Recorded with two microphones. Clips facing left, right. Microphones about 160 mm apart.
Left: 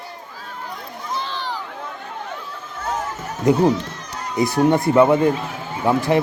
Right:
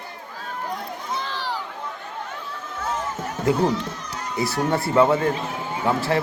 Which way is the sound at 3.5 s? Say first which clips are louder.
Left 5 dB; 20° left (ahead or behind).